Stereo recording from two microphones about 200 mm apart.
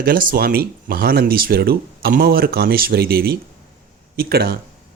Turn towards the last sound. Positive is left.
turn(degrees=-50)  # may be behind; listen again after turning